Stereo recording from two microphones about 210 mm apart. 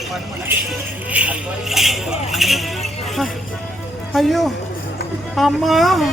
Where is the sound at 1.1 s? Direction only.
5° right (ahead or behind).